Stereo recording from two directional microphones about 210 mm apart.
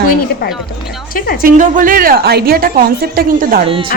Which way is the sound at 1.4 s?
40° right (ahead or behind).